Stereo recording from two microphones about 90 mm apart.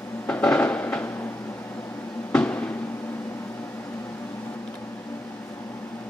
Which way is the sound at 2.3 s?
15° left (ahead or behind).